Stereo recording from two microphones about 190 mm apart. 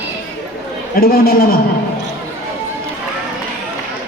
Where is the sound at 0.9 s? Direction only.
50° left (ahead or behind).